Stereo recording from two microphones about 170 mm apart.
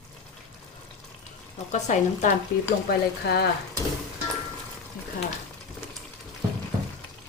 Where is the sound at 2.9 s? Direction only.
70° left (ahead or behind).